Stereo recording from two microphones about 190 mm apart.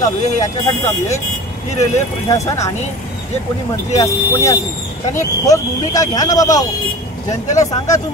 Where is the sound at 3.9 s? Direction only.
15° left (ahead or behind).